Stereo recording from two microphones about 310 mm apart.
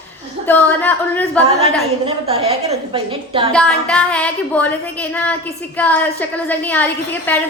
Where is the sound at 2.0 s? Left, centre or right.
Centre.